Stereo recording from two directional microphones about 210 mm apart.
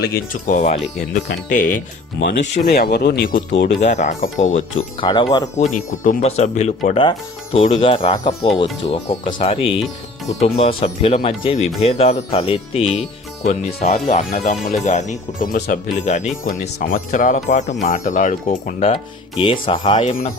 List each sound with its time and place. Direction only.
0.0 s speech: 40° left (ahead or behind)
3.8 s speech: 35° left (ahead or behind)
4.9 s speech: 20° left (ahead or behind)
5.7 s speech: 40° left (ahead or behind)
13.4 s speech: 40° left (ahead or behind)
13.8 s speech: 30° left (ahead or behind)
19.4 s speech: 25° left (ahead or behind)